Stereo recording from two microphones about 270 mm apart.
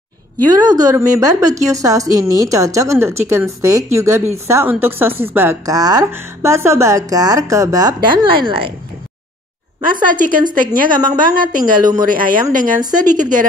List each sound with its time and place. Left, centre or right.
0.5 s a woman's voice: centre
9.8 s a woman's voice: right